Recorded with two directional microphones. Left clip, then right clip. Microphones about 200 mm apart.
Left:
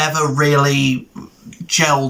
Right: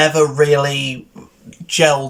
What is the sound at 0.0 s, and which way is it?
Speech, 15° right (ahead or behind).